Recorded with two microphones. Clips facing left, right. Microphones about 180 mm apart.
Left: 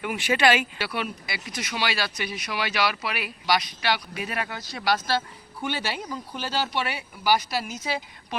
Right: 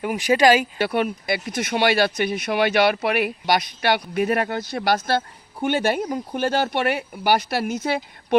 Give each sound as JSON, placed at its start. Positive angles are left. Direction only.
{"t": 0.0, "sound": "speech", "side_deg": -35}